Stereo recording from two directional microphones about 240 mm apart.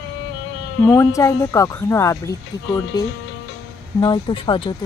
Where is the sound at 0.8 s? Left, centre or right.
Centre.